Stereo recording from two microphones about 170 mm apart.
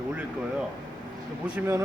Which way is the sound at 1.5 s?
15° right (ahead or behind).